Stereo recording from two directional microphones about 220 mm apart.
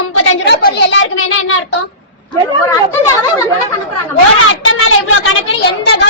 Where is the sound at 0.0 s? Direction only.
65° left (ahead or behind).